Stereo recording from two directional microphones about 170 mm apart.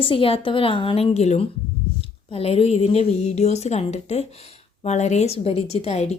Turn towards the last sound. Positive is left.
turn(degrees=35)  # may be behind; listen again after turning